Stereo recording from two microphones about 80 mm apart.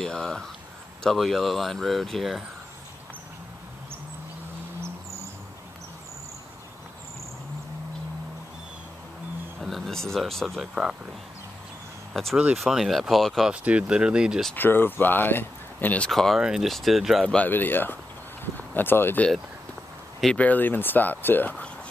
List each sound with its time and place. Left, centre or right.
0.0 s speech: centre
9.6 s speech: centre
12.1 s speech: centre
13.5 s speech: centre
14.5 s speech: left
16.1 s speech: centre
16.3 s speech: centre
17.5 s speech: left
20.3 s speech: left